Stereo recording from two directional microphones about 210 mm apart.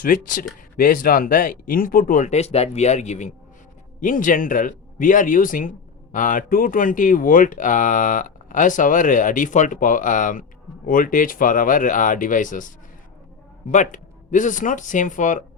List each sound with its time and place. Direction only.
0.0 s speech: 40° left (ahead or behind)